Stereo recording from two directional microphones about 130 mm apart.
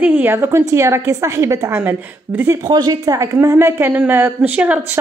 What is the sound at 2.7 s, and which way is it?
A woman's voice, 30° right (ahead or behind).